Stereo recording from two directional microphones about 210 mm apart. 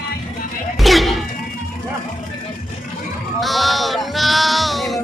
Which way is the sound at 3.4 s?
Centre (ahead or behind).